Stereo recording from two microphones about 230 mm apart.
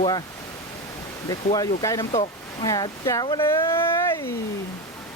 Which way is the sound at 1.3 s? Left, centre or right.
Centre.